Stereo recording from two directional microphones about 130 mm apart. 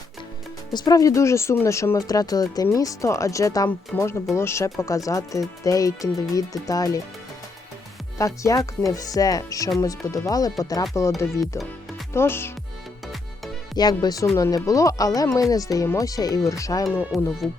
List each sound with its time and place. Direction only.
0.7 s speech: 30° left (ahead or behind)
3.9 s speech: 15° left (ahead or behind)
8.2 s speech: 25° left (ahead or behind)
12.1 s speech: 20° left (ahead or behind)
13.7 s speech: 30° left (ahead or behind)
17.1 s speech: centre (ahead or behind)